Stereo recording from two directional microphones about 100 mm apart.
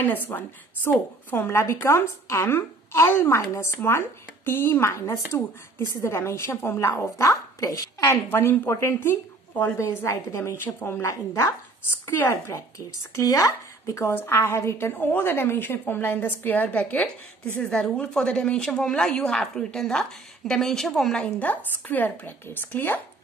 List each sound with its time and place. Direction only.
0.0 s a woman's voice: 20° left (ahead or behind)
12.5 s a woman's voice: 35° left (ahead or behind)